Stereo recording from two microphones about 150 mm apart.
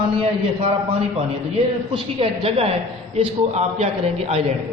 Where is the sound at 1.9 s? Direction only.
40° right (ahead or behind).